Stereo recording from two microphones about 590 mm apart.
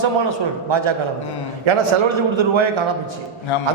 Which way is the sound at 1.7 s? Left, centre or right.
Right.